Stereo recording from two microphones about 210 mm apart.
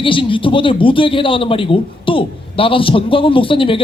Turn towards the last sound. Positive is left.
turn(degrees=25)  # may be behind; listen again after turning